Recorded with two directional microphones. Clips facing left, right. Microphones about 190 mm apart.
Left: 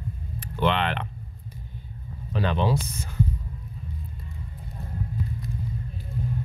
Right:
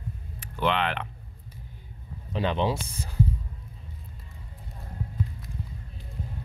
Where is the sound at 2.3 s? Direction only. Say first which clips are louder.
Left 1 dB; 20° right (ahead or behind).